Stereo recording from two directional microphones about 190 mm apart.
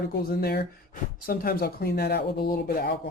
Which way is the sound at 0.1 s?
55° left (ahead or behind).